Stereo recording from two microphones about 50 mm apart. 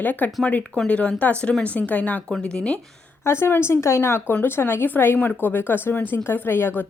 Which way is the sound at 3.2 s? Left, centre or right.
Left.